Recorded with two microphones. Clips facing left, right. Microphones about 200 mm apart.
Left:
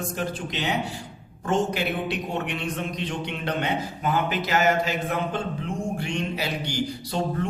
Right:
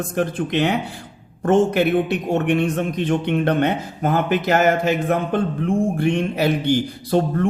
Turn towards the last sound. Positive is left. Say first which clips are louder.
# right 8 dB
turn(degrees=-55)  # may be behind; listen again after turning